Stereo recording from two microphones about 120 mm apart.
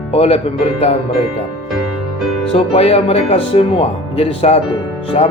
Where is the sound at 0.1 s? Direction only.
55° left (ahead or behind).